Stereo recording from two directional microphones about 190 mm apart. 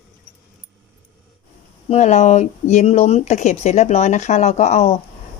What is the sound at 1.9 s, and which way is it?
A woman's voice, 35° left (ahead or behind).